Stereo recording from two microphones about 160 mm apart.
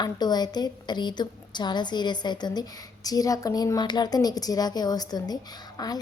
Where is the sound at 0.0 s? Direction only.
25° left (ahead or behind).